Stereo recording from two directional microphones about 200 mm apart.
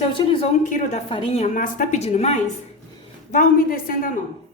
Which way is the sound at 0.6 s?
35° left (ahead or behind).